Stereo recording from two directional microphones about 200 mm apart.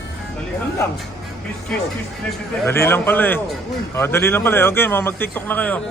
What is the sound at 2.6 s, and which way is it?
A man's voice, 10° left (ahead or behind).